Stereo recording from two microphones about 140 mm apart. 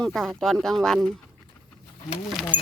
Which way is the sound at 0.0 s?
5° left (ahead or behind).